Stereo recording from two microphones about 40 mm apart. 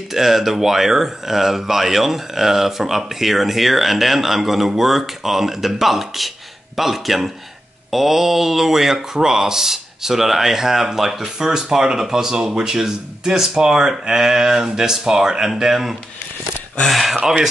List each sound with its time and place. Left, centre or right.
0.1 s speech: centre
17.1 s speech: centre